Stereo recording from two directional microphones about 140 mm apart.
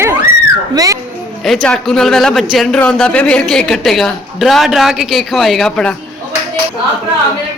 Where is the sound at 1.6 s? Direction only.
5° left (ahead or behind).